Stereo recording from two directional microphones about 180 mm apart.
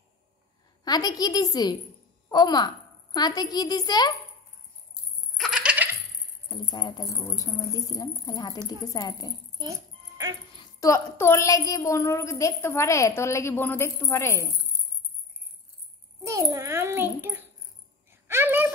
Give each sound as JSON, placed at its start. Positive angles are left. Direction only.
{"t": 0.8, "sound": "a child's voice", "side_deg": 20}
{"t": 5.4, "sound": "coin", "side_deg": -5}
{"t": 6.5, "sound": "speech", "side_deg": 25}
{"t": 9.6, "sound": "music", "side_deg": -20}
{"t": 10.5, "sound": "a woman's voice", "side_deg": 20}
{"t": 16.3, "sound": "a child's voice", "side_deg": -15}
{"t": 18.1, "sound": "a sound", "side_deg": -15}